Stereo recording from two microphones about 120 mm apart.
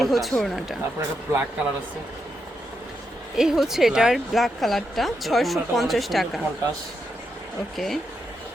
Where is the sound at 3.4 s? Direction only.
5° right (ahead or behind).